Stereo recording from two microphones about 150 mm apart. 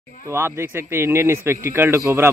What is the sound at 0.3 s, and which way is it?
Speech, 15° right (ahead or behind).